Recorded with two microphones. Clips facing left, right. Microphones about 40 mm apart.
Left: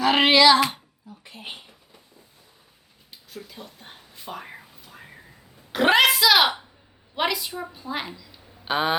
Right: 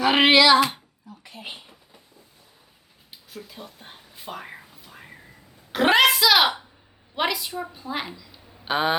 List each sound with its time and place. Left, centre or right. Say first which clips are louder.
0.0 s speech: even; centre
1.3 s speech: even; left
3.3 s a sound: even; centre
7.2 s a woman's voice: even; centre